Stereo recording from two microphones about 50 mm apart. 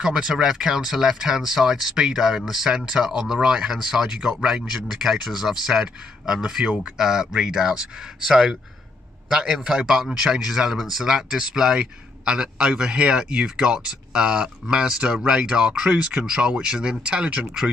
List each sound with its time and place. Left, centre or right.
0.0 s a man's voice: centre
15.9 s speech: right